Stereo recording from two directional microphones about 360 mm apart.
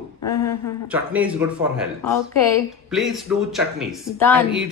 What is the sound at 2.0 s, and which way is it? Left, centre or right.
Speech, centre.